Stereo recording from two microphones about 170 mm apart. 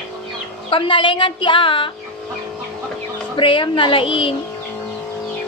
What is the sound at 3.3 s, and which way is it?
A woman's voice, 30° left (ahead or behind).